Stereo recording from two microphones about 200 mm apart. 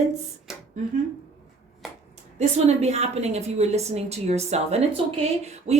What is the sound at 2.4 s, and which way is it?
A woman's voice, 30° right (ahead or behind).